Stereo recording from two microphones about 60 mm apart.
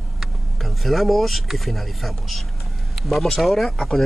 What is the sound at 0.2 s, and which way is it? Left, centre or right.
Speech, centre.